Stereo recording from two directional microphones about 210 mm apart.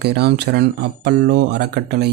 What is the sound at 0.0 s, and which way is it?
Speech, 50° right (ahead or behind).